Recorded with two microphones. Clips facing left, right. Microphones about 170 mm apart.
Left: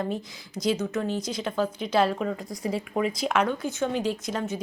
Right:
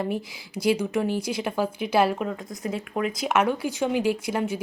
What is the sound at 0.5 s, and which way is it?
Speech, 10° right (ahead or behind).